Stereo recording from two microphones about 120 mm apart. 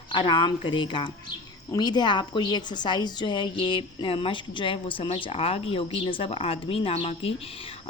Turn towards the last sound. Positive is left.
turn(degrees=55)  # may be behind; listen again after turning